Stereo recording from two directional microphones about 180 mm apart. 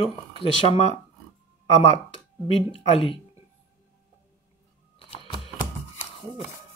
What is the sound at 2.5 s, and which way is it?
Speech, 30° left (ahead or behind).